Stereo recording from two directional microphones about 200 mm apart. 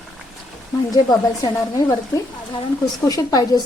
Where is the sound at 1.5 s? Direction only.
15° left (ahead or behind).